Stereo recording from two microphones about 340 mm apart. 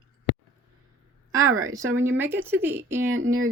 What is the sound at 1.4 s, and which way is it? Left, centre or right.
Speech, right.